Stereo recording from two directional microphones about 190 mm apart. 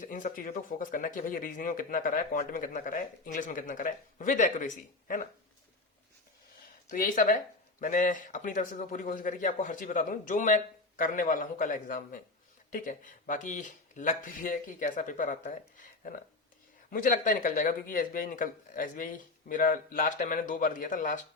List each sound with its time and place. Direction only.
0.0 s speech: 45° left (ahead or behind)
6.9 s speech: 45° left (ahead or behind)
16.9 s speech: 45° left (ahead or behind)